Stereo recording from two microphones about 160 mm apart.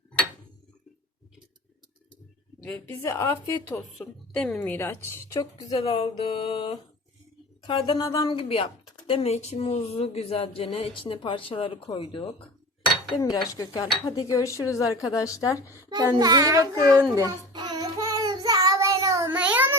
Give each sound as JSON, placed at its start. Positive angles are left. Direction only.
{"t": 2.6, "sound": "a woman's voice", "side_deg": 5}
{"t": 2.9, "sound": "speech", "side_deg": 20}
{"t": 3.9, "sound": "a woman's voice", "side_deg": 0}
{"t": 5.7, "sound": "speech", "side_deg": 35}
{"t": 15.9, "sound": "a child's voice", "side_deg": -25}
{"t": 17.2, "sound": "child singing", "side_deg": -25}
{"t": 19.3, "sound": "a sound", "side_deg": -10}